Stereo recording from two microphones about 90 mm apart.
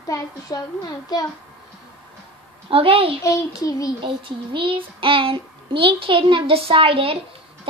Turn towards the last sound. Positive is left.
turn(degrees=-90)